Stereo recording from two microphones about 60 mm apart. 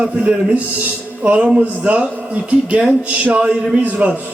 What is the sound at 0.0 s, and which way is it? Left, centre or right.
A man's voice, right.